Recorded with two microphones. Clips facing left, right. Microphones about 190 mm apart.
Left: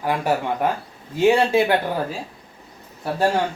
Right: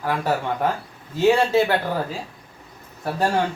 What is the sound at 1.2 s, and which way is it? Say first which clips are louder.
Speech: left 1 dB; 15° left (ahead or behind).